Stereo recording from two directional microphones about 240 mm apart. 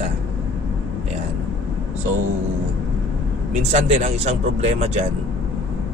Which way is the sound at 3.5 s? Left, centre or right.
Right.